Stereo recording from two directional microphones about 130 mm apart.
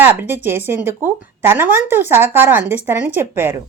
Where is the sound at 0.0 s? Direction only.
15° right (ahead or behind).